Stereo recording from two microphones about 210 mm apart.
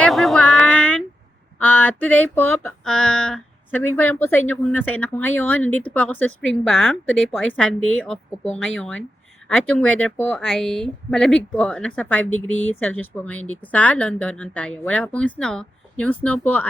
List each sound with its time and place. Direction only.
0.0 s child singing: centre (ahead or behind)
1.5 s music: 5° left (ahead or behind)
5.9 s speech: 10° left (ahead or behind)
9.5 s music: 5° left (ahead or behind)
9.8 s speech: 5° left (ahead or behind)